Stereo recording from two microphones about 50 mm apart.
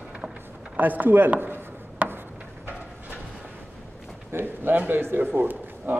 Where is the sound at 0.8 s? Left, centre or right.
Right.